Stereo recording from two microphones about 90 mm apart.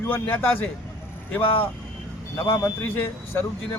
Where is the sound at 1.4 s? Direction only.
90° left.